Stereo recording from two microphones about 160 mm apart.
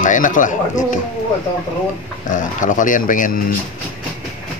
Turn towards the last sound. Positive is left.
turn(degrees=55)  # may be behind; listen again after turning